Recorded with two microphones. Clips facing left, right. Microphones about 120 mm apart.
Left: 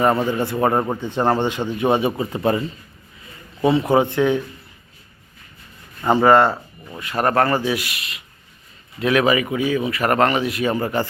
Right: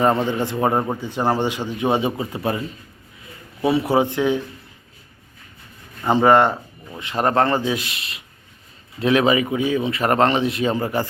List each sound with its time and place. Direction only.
0.3 s speech: 15° right (ahead or behind)
6.1 s speech: 20° right (ahead or behind)